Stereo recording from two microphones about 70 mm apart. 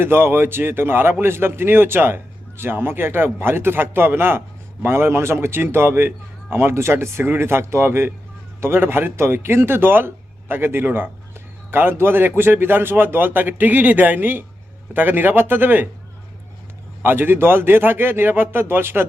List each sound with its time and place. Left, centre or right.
0.0 s a man's voice: right
17.0 s a man's voice: right